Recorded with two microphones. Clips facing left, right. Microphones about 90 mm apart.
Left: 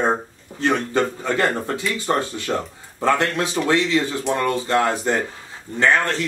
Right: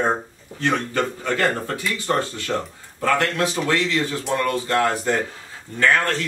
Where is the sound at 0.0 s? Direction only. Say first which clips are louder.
Left 1 dB; 20° left (ahead or behind).